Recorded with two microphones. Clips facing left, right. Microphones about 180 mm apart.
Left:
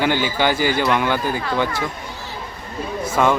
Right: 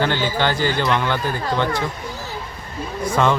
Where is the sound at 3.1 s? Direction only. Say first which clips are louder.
Left 1 dB; 10° left (ahead or behind).